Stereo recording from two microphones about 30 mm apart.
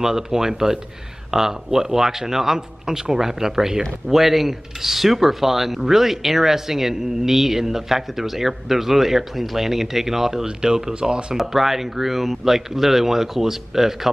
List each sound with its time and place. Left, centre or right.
0.0 s speech: centre
11.3 s speech: centre